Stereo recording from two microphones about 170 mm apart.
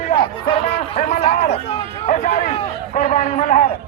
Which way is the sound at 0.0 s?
30° left (ahead or behind).